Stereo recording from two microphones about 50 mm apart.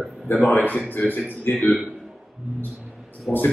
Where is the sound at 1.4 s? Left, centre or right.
Left.